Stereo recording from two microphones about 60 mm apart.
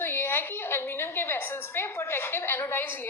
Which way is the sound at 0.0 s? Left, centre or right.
Left.